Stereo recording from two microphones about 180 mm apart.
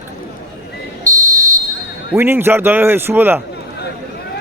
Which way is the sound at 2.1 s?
10° right (ahead or behind).